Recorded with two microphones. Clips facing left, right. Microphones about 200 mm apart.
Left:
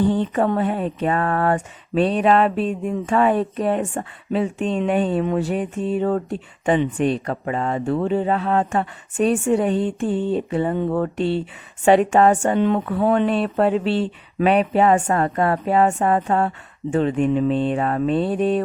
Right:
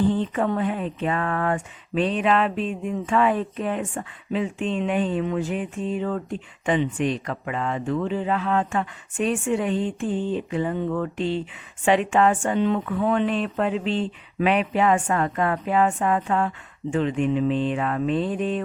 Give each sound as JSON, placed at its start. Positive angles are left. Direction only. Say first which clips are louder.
{"t": 0.3, "sound": "speech", "louder": "left 4 dB", "side_deg": 45}
{"t": 12.5, "sound": "speech", "louder": "left 3 dB", "side_deg": 55}
{"t": 12.8, "sound": "speech", "louder": "left 4 dB", "side_deg": 40}